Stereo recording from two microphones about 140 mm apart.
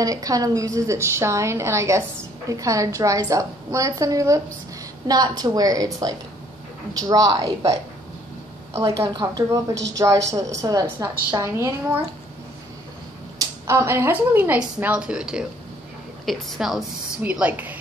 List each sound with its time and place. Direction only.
0.0 s a woman's voice: 25° right (ahead or behind)
13.4 s a woman's voice: 20° right (ahead or behind)